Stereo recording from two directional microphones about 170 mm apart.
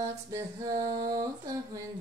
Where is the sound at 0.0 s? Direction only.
20° right (ahead or behind).